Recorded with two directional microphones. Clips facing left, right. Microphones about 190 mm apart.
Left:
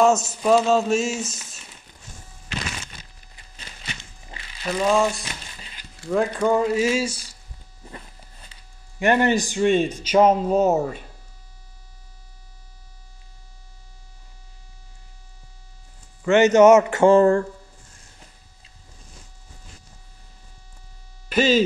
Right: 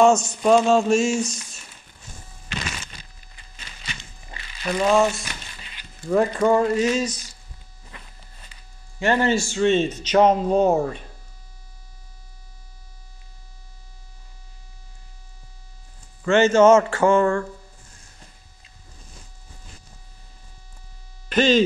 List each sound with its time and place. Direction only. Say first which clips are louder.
0.0 s a sound: right 2 dB; 5° left (ahead or behind)
4.6 s a sound: right 1 dB; centre (ahead or behind)
6.0 s speech: right 2 dB; centre (ahead or behind)
9.0 s speech: left 1 dB; 15° left (ahead or behind)
16.3 s speech: left 1 dB; 20° left (ahead or behind)
17.1 s speech: left 4 dB; 35° left (ahead or behind)
21.3 s speech: right 1 dB; 5° left (ahead or behind)